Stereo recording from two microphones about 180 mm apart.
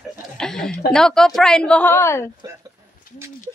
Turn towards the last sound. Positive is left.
turn(degrees=50)  # may be behind; listen again after turning